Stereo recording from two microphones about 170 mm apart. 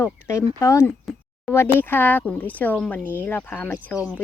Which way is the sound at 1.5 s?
Centre (ahead or behind).